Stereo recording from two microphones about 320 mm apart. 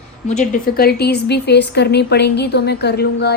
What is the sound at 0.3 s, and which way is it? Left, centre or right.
A woman's voice, left.